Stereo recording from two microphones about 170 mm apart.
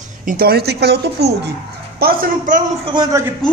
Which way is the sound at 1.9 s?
60° right (ahead or behind).